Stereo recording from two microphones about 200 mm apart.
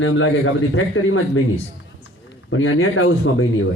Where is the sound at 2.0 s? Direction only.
70° left (ahead or behind).